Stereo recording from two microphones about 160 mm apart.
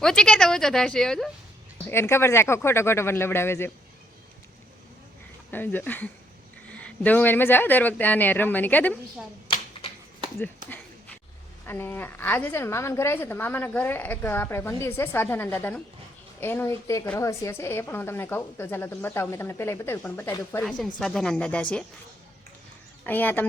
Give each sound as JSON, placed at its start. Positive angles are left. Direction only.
{"t": 0.0, "sound": "a woman's voice", "side_deg": 5}
{"t": 1.9, "sound": "a woman's voice", "side_deg": 15}
{"t": 5.5, "sound": "a woman's voice", "side_deg": 10}
{"t": 9.5, "sound": "a sound", "side_deg": 35}
{"t": 11.6, "sound": "a woman's voice", "side_deg": 15}
{"t": 20.7, "sound": "a woman's voice", "side_deg": 5}
{"t": 23.0, "sound": "a woman's voice", "side_deg": 10}